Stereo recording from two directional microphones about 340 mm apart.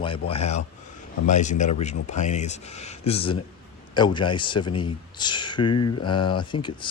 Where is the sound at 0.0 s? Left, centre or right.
Centre.